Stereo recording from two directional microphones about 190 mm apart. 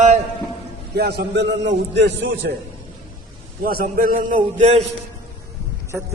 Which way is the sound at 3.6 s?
50° right (ahead or behind).